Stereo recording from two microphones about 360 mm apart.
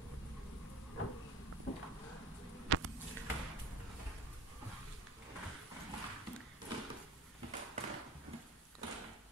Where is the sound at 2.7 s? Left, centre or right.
Right.